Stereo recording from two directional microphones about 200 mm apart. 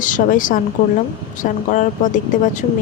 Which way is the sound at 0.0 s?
40° left (ahead or behind).